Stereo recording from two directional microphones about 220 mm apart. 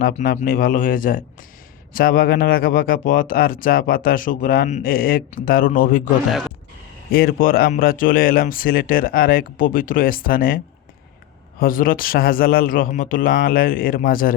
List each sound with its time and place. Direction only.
0.0 s speech: 35° left (ahead or behind)
7.1 s speech: 40° left (ahead or behind)
11.6 s speech: 40° left (ahead or behind)